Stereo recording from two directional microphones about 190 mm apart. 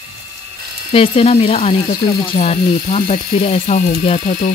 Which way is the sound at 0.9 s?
30° left (ahead or behind).